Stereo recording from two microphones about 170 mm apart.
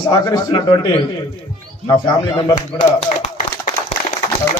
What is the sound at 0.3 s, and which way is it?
Speech, 25° left (ahead or behind).